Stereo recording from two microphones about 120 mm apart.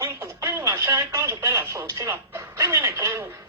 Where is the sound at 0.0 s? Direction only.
25° right (ahead or behind).